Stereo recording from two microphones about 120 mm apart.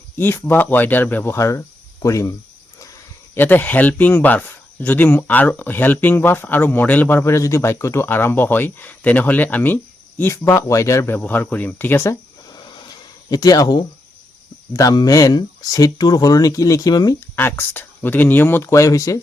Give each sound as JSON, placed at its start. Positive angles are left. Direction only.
{"t": 0.2, "sound": "speech", "side_deg": 15}
{"t": 3.3, "sound": "speech", "side_deg": 15}
{"t": 12.5, "sound": "a sound", "side_deg": 40}
{"t": 14.7, "sound": "speech", "side_deg": 30}
{"t": 17.2, "sound": "speech", "side_deg": 20}